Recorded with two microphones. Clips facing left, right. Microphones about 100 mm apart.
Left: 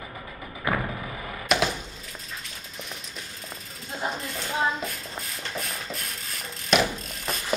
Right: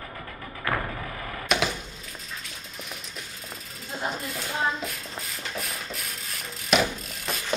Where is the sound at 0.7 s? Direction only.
15° left (ahead or behind).